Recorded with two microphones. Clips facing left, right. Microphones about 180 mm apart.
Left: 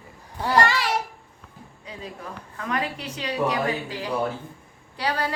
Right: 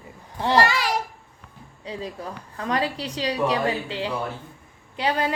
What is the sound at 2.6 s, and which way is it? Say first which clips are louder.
A woman's voice: right 3 dB; 30° right (ahead or behind).